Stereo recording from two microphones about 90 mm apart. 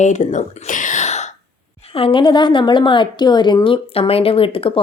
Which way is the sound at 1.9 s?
80° left.